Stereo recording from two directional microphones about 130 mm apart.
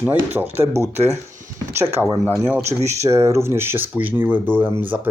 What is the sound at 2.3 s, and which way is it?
Speech, 15° right (ahead or behind).